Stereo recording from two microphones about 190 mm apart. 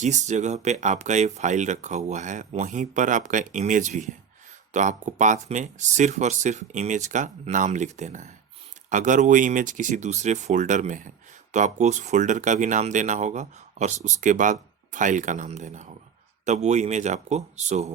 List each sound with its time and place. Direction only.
0.0 s speech: 40° right (ahead or behind)